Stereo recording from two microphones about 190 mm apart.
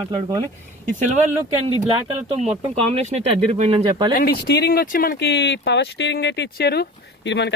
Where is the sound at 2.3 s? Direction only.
35° right (ahead or behind).